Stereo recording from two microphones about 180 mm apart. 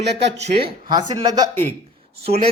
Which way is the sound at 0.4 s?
30° right (ahead or behind).